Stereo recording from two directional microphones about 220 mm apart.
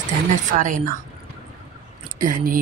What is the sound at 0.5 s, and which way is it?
Speech, 35° right (ahead or behind).